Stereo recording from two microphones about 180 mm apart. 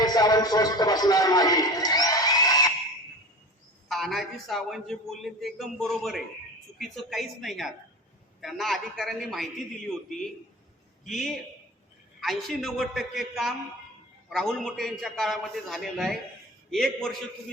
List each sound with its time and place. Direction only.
0.0 s speech: 20° left (ahead or behind)
3.8 s a man's voice: centre (ahead or behind)
11.0 s a man's voice: centre (ahead or behind)